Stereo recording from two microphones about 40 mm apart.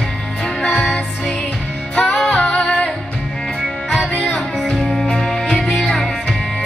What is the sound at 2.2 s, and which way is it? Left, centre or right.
Singing, left.